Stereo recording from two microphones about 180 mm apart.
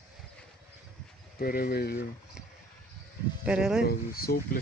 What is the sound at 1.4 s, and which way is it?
Speech, 55° left (ahead or behind).